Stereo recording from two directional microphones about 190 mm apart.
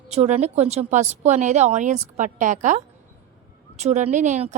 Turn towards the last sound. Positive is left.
turn(degrees=-40)  # may be behind; listen again after turning